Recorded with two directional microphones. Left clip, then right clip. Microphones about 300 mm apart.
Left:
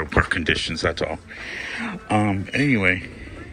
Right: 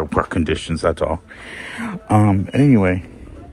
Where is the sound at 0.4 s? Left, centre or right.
Centre.